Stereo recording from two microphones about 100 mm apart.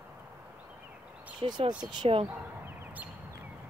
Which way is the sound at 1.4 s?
45° right (ahead or behind).